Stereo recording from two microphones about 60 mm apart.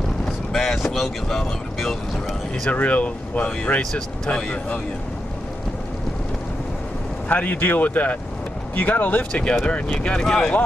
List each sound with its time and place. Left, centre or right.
0.5 s speech: centre
2.7 s speech: left
7.2 s speech: left